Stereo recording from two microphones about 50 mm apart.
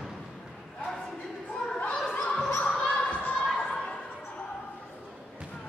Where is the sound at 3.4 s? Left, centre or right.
Centre.